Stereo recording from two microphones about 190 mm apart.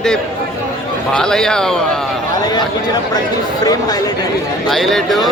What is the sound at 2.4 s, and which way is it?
A man's voice, 20° left (ahead or behind).